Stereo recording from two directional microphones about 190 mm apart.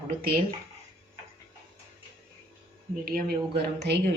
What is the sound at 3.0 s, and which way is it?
Speech, 50° right (ahead or behind).